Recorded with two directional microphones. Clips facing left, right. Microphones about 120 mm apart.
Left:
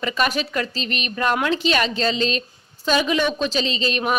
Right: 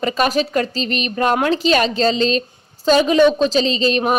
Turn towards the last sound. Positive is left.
turn(degrees=-35)  # may be behind; listen again after turning